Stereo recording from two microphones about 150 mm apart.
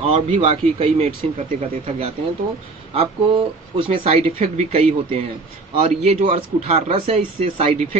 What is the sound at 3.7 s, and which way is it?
Speech, 40° right (ahead or behind).